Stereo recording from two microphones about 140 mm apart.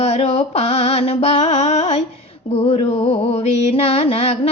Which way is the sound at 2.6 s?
40° left (ahead or behind).